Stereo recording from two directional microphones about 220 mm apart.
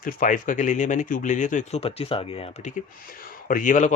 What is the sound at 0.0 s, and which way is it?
Speech, 35° left (ahead or behind).